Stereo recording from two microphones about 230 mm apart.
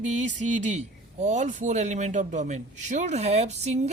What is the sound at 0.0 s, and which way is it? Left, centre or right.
A man's voice, right.